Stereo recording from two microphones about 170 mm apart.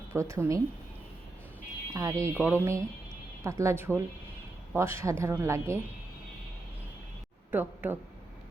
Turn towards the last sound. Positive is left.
turn(degrees=-10)  # may be behind; listen again after turning